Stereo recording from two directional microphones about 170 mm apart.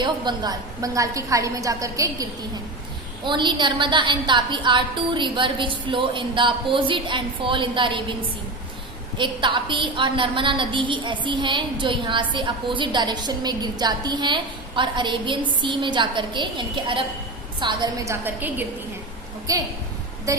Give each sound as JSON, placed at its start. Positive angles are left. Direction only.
{"t": 0.0, "sound": "a woman's voice", "side_deg": -25}
{"t": 3.2, "sound": "a woman's voice", "side_deg": -30}
{"t": 9.1, "sound": "a woman's voice", "side_deg": -30}
{"t": 19.5, "sound": "a woman's voice", "side_deg": -20}